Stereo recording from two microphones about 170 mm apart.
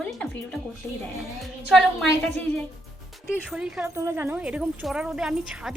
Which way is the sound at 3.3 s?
5° right (ahead or behind).